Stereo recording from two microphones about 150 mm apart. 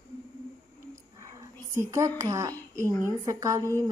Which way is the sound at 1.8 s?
20° right (ahead or behind).